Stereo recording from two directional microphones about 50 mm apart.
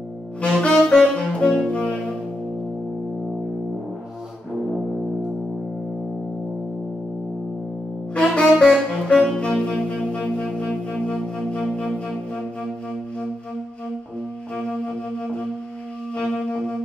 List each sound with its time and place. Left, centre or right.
0.4 s saxophone: centre
1.7 s music: left
8.1 s saxophone: centre
10.2 s music: left
14.5 s flute: centre
16.2 s wind instrument: centre